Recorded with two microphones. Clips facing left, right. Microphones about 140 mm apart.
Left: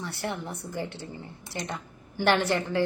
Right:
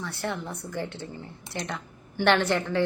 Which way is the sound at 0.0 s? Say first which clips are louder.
Right 1 dB; 15° left (ahead or behind).